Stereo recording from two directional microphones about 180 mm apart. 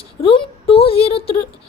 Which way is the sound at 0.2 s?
30° left (ahead or behind).